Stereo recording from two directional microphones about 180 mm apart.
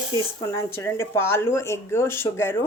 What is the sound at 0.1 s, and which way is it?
Speech, 20° right (ahead or behind).